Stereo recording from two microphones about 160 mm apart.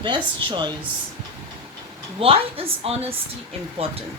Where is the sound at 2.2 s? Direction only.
35° right (ahead or behind).